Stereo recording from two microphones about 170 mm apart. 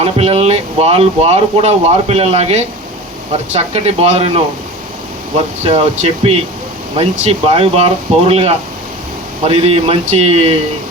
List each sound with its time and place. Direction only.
0.0 s speech: 35° right (ahead or behind)
5.6 s speech: 35° right (ahead or behind)